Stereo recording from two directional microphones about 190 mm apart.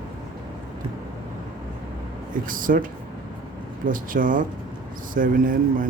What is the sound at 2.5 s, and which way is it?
Speech, 45° right (ahead or behind).